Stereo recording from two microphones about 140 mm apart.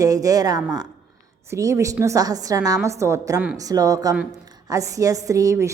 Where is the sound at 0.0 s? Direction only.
25° right (ahead or behind).